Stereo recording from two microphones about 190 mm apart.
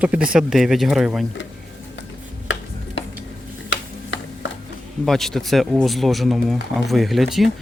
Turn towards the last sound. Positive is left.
turn(degrees=0)  # may be behind; listen again after turning